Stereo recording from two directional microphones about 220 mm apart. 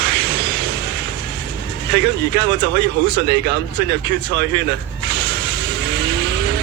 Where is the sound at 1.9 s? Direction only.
50° right (ahead or behind).